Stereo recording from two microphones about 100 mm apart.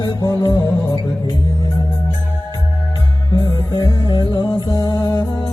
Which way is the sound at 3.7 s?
35° left (ahead or behind).